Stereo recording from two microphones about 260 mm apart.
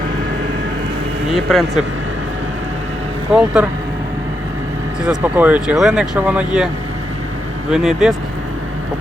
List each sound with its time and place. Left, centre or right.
1.3 s speech: centre
3.3 s speech: centre
5.0 s speech: centre
7.7 s speech: centre